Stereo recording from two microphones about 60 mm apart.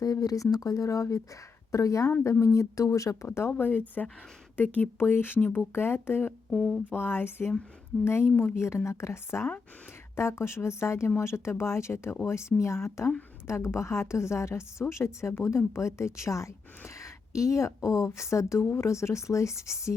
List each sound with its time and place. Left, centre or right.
0.0 s speech: left
3.2 s a woman's voice: left
3.5 s speech: left
5.7 s speech: left
6.5 s speech: centre
6.9 s a woman's voice: left
17.0 s a sound: left
17.7 s speech: left